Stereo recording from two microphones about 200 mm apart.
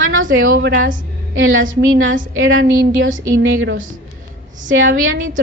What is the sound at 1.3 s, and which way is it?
A woman's voice, 80° right.